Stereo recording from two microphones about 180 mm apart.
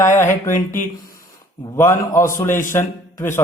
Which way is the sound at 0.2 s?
15° left (ahead or behind).